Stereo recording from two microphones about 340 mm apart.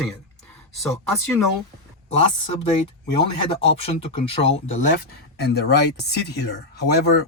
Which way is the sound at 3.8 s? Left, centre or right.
Centre.